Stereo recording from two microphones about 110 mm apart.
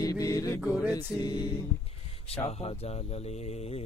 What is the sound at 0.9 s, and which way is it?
Music, 40° left (ahead or behind).